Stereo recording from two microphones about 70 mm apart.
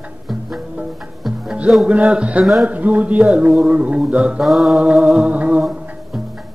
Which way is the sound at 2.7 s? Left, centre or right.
Right.